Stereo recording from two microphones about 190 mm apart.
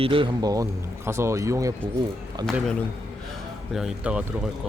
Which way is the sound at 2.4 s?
5° left (ahead or behind).